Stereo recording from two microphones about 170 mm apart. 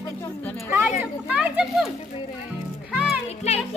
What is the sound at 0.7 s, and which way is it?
Speech, 10° right (ahead or behind).